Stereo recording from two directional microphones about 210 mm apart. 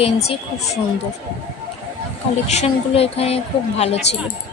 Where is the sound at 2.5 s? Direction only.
30° left (ahead or behind).